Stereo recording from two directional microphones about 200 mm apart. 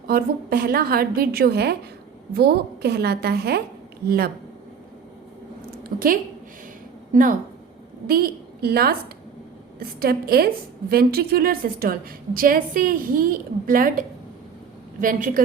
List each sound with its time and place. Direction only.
0.1 s a woman's voice: 50° right (ahead or behind)
5.9 s a woman's voice: 45° right (ahead or behind)
7.1 s a woman's voice: 40° right (ahead or behind)